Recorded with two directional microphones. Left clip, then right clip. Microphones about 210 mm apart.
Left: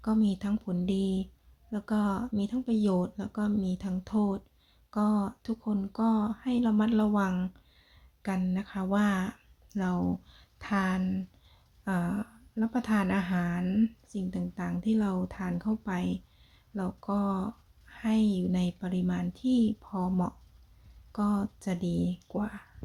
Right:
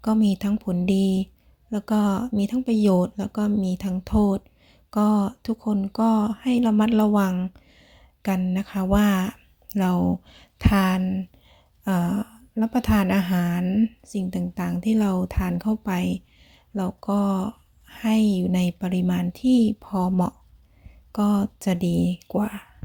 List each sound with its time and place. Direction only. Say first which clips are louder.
0.0 s speech: right 7 dB; 35° right (ahead or behind)